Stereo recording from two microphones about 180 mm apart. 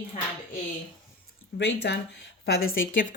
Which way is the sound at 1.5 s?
75° left (ahead or behind).